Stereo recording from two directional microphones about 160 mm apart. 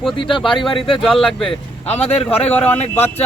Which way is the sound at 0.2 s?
30° left (ahead or behind).